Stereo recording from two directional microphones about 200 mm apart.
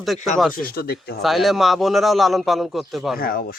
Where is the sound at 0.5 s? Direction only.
45° left (ahead or behind).